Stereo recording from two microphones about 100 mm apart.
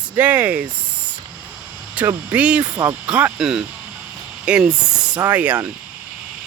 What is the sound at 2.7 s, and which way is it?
Speech, 25° right (ahead or behind).